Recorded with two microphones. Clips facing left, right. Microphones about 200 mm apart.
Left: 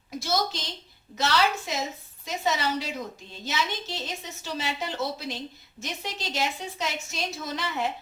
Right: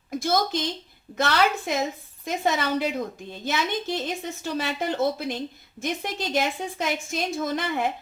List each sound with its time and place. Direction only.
0.2 s a woman's voice: 55° right (ahead or behind)